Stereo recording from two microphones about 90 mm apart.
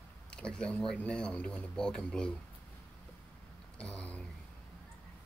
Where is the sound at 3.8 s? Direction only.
15° left (ahead or behind).